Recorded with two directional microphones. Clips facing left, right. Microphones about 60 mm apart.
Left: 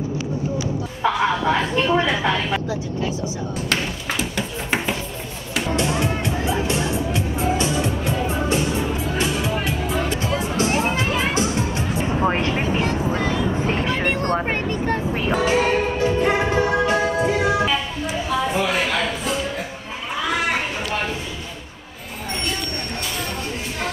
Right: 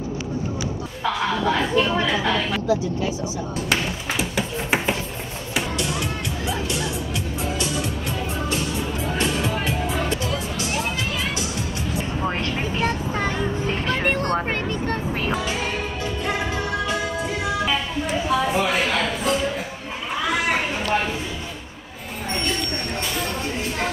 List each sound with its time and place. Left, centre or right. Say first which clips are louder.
1.0 s a sound: left 3 dB; centre
3.6 s music: even; centre
5.7 s music: left 5 dB; left
9.0 s music: left 1 dB; centre
10.2 s music: left 5 dB; left
12.9 s vehicle: left 4 dB; centre
13.2 s vehicle: left 2 dB; right
13.5 s vehicle: left 2 dB; left
13.9 s vehicle: left 1 dB; centre
15.3 s music: left 7 dB; left
18.3 s a sound: even; centre